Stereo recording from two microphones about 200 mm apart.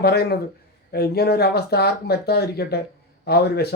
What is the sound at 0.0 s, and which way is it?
A man's voice, 50° left (ahead or behind).